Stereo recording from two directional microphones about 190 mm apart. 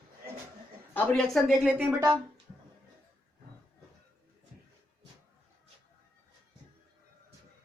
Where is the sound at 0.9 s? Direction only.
5° left (ahead or behind).